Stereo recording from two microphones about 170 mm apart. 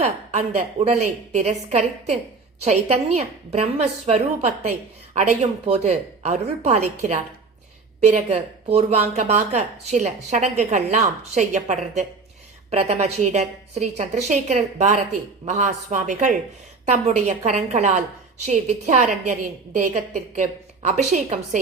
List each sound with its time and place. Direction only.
0.0 s a woman's voice: 40° right (ahead or behind)